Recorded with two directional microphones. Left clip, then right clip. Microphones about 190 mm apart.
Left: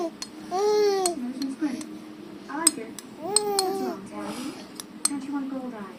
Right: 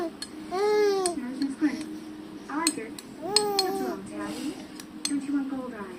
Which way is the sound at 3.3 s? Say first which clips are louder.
Even; 10° left (ahead or behind).